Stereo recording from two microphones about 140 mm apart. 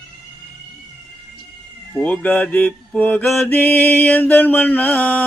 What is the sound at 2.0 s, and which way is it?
Mantra, 10° left (ahead or behind).